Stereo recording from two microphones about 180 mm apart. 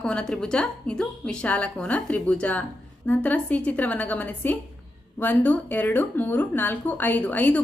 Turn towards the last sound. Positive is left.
turn(degrees=10)  # may be behind; listen again after turning